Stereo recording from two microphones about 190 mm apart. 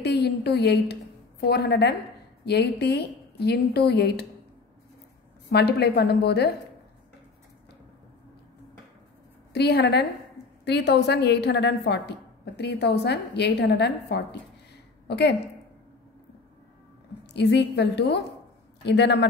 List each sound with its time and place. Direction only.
0.0 s a woman's voice: 60° left (ahead or behind)
5.5 s a woman's voice: 60° left (ahead or behind)
9.5 s a woman's voice: 60° left (ahead or behind)
17.3 s a woman's voice: 60° left (ahead or behind)